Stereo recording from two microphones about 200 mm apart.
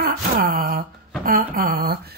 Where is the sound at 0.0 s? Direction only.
50° right (ahead or behind).